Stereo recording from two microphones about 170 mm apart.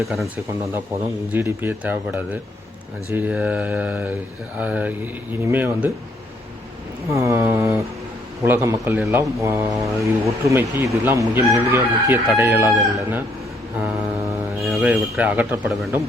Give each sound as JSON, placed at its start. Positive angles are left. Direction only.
{"t": 0.0, "sound": "speech", "side_deg": 0}
{"t": 1.3, "sound": "speech", "side_deg": -10}
{"t": 7.1, "sound": "speech", "side_deg": -15}
{"t": 14.6, "sound": "speech", "side_deg": -5}